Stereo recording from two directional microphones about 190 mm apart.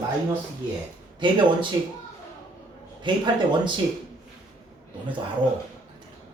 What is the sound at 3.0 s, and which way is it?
Speech, 25° right (ahead or behind).